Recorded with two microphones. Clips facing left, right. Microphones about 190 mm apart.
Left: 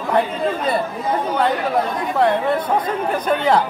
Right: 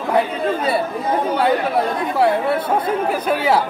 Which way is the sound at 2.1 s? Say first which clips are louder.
Even; 10° right (ahead or behind).